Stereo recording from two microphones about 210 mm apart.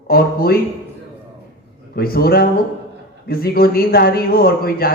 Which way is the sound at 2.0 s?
45° left (ahead or behind).